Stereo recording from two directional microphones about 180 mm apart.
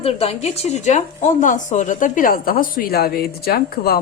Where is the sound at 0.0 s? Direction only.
35° left (ahead or behind).